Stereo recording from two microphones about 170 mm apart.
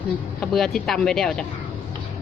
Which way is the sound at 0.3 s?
5° left (ahead or behind).